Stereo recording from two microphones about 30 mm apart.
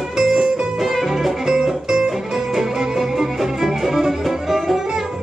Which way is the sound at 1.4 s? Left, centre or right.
Centre.